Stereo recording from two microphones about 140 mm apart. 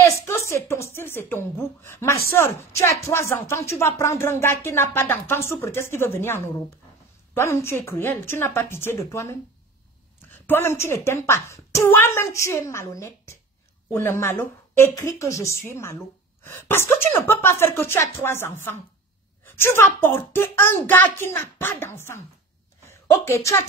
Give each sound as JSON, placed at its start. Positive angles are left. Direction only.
{"t": 0.5, "sound": "a woman's voice", "side_deg": 20}
{"t": 10.4, "sound": "a woman's voice", "side_deg": 15}